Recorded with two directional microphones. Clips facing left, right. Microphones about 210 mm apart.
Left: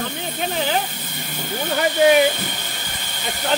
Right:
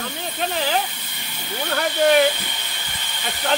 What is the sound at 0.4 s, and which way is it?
Speech, centre (ahead or behind).